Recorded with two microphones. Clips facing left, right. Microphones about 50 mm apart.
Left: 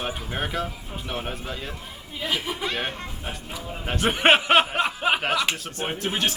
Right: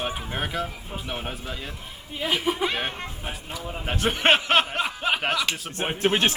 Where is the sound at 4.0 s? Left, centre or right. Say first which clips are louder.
Left 2 dB; centre.